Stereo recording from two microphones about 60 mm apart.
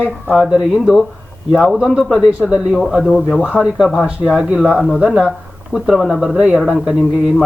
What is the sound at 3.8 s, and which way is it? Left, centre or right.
A man's voice, centre.